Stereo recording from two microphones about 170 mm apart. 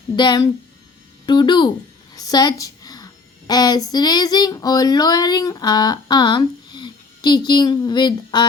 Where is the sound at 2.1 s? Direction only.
20° left (ahead or behind).